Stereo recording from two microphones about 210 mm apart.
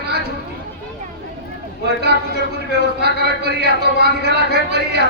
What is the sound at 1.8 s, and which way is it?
A man's voice, 50° right (ahead or behind).